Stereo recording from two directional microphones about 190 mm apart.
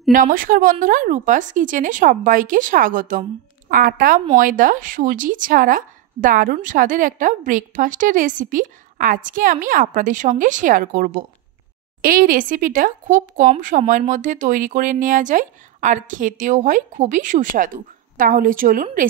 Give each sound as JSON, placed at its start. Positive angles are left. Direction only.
{"t": 0.1, "sound": "a woman's voice", "side_deg": -45}